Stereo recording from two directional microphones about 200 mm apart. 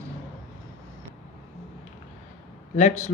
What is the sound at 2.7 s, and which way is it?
Speech, 35° left (ahead or behind).